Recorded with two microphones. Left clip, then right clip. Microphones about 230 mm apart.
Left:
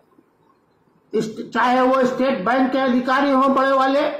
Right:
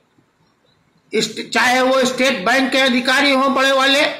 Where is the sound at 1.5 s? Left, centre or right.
Right.